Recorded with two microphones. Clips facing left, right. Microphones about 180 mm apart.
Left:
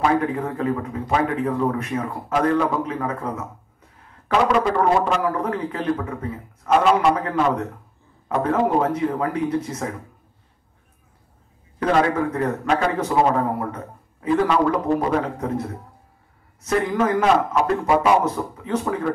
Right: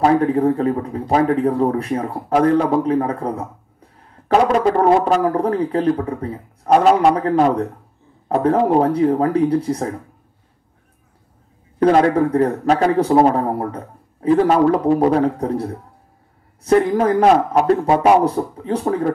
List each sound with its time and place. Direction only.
0.0 s speech: 35° right (ahead or behind)
11.8 s speech: 35° right (ahead or behind)